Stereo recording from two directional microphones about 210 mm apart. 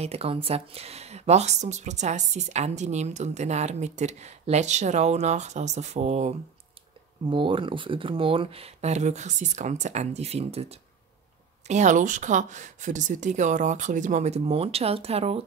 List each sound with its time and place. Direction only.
0.0 s speech: 30° right (ahead or behind)